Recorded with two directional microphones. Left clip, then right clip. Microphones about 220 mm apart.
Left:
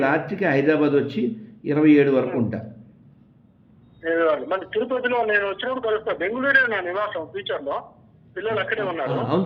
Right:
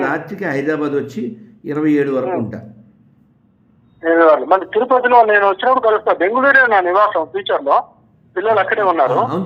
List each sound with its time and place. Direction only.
0.0 s speech: 10° right (ahead or behind)
4.0 s speech: centre (ahead or behind)